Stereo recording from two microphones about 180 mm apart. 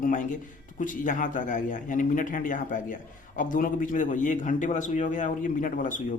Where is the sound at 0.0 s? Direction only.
45° left (ahead or behind).